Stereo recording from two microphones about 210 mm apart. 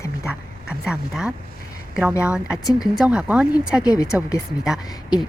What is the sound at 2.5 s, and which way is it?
Speech, 20° left (ahead or behind).